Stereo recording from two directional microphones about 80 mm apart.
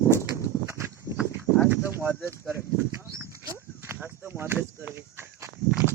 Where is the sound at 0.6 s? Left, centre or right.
Right.